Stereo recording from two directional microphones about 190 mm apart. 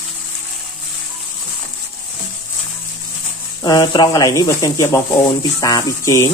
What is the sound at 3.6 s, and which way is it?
Speech, 20° left (ahead or behind).